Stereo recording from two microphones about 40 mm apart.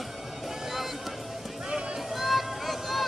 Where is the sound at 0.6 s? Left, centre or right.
Centre.